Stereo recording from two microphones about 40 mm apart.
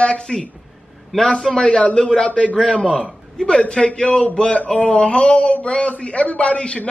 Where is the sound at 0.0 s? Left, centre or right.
Left.